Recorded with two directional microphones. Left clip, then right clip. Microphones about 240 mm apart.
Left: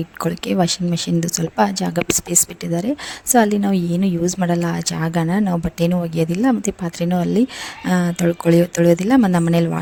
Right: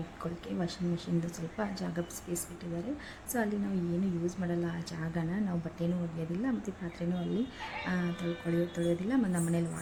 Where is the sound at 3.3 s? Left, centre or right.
Left.